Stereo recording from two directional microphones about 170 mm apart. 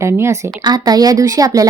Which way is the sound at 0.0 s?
15° right (ahead or behind).